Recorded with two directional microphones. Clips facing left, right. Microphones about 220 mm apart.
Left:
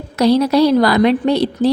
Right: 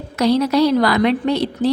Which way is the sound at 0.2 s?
35° left (ahead or behind).